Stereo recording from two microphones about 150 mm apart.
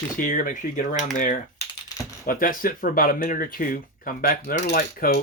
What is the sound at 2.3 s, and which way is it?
Speech, 70° left (ahead or behind).